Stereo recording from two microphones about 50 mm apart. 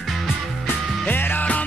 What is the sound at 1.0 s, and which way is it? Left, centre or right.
Music, left.